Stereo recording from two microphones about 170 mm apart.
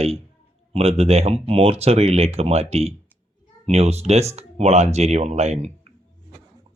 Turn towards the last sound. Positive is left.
turn(degrees=-40)  # may be behind; listen again after turning